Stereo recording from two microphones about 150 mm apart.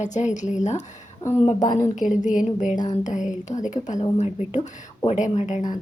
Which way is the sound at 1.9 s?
55° left (ahead or behind).